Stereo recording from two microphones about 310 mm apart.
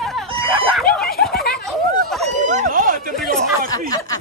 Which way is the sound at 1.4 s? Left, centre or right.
Left.